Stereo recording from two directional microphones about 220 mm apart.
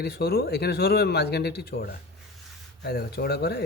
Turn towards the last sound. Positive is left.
turn(degrees=45)  # may be behind; listen again after turning